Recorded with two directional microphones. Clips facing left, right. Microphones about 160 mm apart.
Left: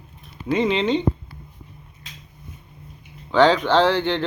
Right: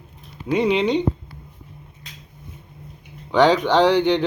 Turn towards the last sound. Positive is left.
turn(degrees=-15)  # may be behind; listen again after turning